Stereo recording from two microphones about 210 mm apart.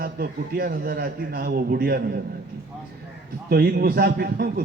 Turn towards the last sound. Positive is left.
turn(degrees=-45)  # may be behind; listen again after turning